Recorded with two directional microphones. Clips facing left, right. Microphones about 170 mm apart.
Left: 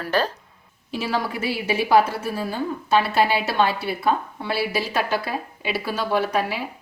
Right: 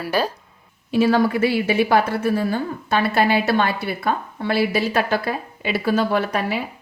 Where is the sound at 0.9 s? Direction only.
55° right (ahead or behind).